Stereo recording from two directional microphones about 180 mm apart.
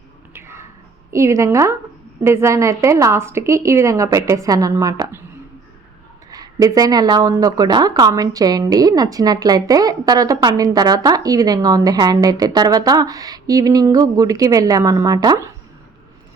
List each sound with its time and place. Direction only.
0.3 s a sound: 15° right (ahead or behind)
1.1 s a woman's voice: 15° right (ahead or behind)
6.3 s a woman's voice: 20° right (ahead or behind)